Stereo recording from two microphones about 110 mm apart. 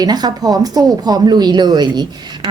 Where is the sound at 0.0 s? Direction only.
40° right (ahead or behind).